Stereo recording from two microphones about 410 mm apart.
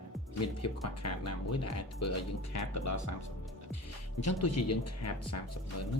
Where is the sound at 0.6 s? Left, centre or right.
Left.